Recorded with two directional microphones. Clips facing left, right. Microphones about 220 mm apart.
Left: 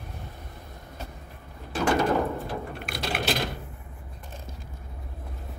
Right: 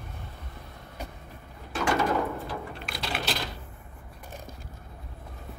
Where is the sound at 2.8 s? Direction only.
50° left (ahead or behind).